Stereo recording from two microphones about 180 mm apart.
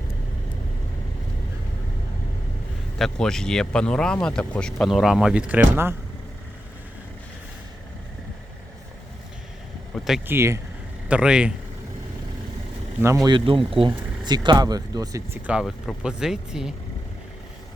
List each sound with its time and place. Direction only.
3.0 s speech: 5° left (ahead or behind)
10.2 s speech: 15° right (ahead or behind)
13.2 s speech: 30° right (ahead or behind); by 16.7 s 5° right (ahead or behind)